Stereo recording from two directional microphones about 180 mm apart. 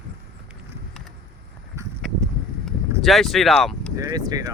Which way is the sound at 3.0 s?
Centre (ahead or behind).